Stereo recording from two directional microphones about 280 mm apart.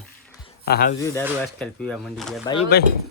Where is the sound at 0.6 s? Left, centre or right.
Left.